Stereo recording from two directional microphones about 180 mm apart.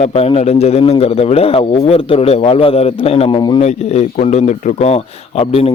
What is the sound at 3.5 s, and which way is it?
Speech, 40° left (ahead or behind).